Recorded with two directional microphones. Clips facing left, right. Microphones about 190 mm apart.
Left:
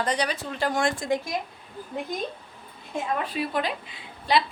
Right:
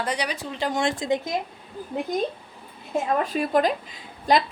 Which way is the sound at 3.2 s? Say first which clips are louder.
Right 6 dB; 45° right (ahead or behind).